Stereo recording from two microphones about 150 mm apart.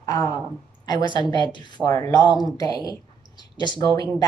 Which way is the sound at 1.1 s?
30° left (ahead or behind).